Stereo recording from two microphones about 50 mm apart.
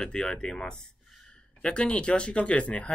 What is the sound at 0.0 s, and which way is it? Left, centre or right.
Speech, centre.